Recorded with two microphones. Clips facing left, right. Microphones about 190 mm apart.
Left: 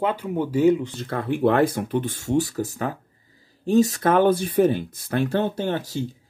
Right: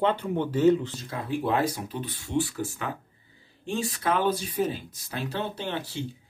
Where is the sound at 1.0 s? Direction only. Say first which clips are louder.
Left 8 dB; 60° left (ahead or behind).